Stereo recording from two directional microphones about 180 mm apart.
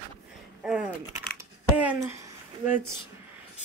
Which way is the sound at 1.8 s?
10° right (ahead or behind).